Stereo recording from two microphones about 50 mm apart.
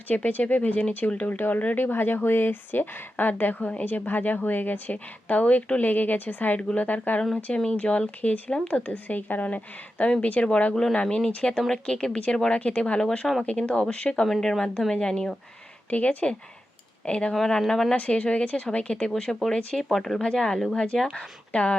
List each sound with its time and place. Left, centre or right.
0.1 s a woman's voice: left
11.5 s a woman's voice: centre
14.3 s speech: centre
15.9 s a woman's voice: left
17.3 s speech: centre
17.9 s a woman's voice: left